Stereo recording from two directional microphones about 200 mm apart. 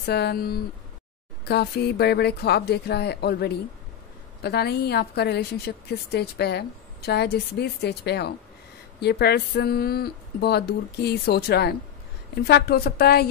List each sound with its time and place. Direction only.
0.0 s a woman's voice: 55° left (ahead or behind)